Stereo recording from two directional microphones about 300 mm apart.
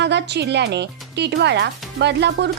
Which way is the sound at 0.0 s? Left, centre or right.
Right.